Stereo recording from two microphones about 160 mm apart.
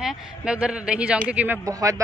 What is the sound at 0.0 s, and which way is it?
Speech, 5° right (ahead or behind).